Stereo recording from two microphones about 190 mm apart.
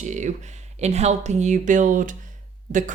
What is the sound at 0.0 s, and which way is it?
Speech, 40° right (ahead or behind).